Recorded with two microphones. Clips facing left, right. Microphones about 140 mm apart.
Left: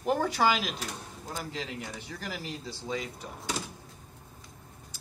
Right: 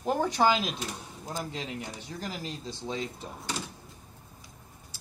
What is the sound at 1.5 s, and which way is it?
Speech, 20° right (ahead or behind).